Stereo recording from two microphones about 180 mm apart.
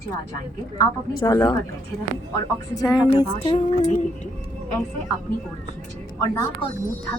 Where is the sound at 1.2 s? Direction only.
20° left (ahead or behind).